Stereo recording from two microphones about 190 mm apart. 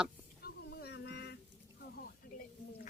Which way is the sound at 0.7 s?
60° left (ahead or behind).